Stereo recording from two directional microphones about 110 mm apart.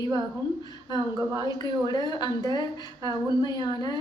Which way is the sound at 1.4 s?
40° left (ahead or behind).